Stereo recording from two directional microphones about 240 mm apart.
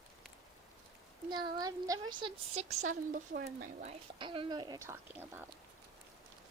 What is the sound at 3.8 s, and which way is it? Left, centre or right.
Speech, right.